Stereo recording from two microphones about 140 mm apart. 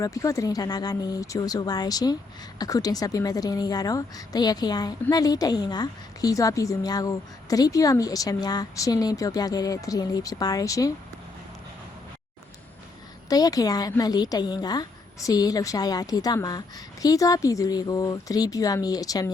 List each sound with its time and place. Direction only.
0.0 s a woman's voice: 25° left (ahead or behind)
13.3 s a woman's voice: 25° left (ahead or behind)